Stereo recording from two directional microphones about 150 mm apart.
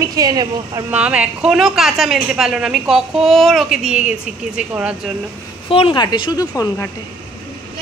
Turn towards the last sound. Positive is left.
turn(degrees=20)  # may be behind; listen again after turning